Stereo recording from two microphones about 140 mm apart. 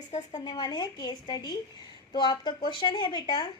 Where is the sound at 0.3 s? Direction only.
30° left (ahead or behind).